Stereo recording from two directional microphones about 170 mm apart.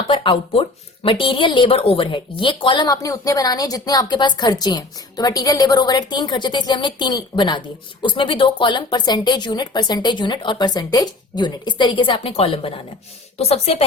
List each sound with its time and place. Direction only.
0.1 s speech: 30° left (ahead or behind)